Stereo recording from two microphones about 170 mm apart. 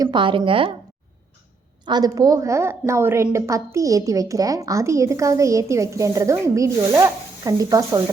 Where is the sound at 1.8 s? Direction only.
25° right (ahead or behind).